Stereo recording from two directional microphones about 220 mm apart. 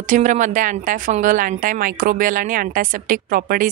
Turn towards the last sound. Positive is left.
turn(degrees=-40)  # may be behind; listen again after turning